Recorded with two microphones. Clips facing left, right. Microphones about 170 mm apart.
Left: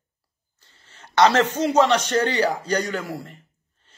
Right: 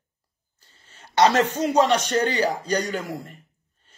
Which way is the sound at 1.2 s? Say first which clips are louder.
Left 1 dB; 15° right (ahead or behind).